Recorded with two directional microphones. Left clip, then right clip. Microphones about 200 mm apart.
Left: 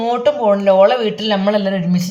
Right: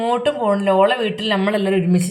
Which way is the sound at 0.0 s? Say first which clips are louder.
Left 3 dB; 5° right (ahead or behind).